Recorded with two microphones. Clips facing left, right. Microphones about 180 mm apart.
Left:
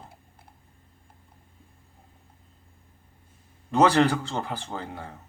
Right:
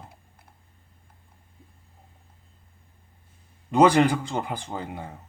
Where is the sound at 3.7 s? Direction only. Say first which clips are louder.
Right 2 dB; 15° right (ahead or behind).